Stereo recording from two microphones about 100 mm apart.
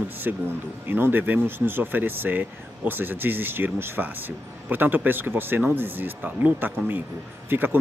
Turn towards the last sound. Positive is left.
turn(degrees=-20)  # may be behind; listen again after turning